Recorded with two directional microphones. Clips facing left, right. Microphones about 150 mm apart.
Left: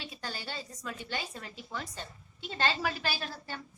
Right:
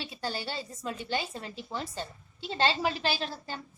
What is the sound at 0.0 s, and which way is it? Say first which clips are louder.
A woman's voice: right 6 dB; 30° right (ahead or behind).